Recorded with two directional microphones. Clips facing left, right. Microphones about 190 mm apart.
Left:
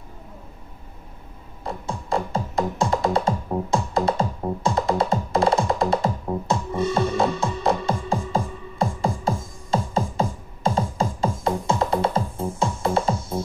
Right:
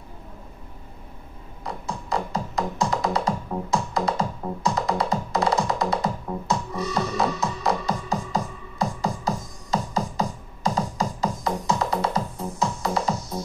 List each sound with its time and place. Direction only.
1.6 s music: 30° left (ahead or behind)